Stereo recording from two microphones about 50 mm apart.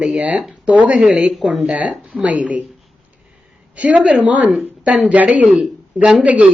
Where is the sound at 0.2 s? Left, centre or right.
Right.